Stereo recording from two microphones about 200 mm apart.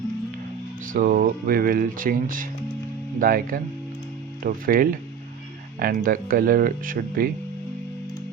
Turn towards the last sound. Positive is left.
turn(degrees=-45)  # may be behind; listen again after turning